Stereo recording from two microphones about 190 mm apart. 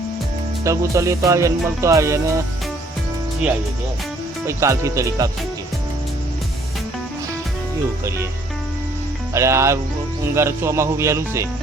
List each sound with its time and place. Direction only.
0.6 s music: 15° right (ahead or behind)
4.4 s music: 15° right (ahead or behind)
9.3 s music: 15° right (ahead or behind)